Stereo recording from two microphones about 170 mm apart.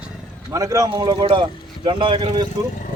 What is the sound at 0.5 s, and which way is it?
Speech, 20° right (ahead or behind).